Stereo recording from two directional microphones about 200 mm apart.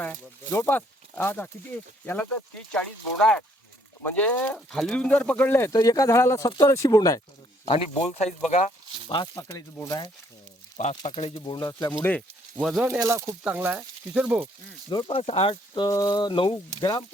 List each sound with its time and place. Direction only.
0.0 s speech: 10° left (ahead or behind)
4.0 s speech: 10° left (ahead or behind)
7.6 s speech: 30° left (ahead or behind)
9.0 s speech: 20° left (ahead or behind)
10.8 s speech: 35° left (ahead or behind)
11.7 s speech: 10° left (ahead or behind)
12.5 s speech: 5° right (ahead or behind)
13.0 s speech: 15° right (ahead or behind)
14.8 s speech: 25° left (ahead or behind)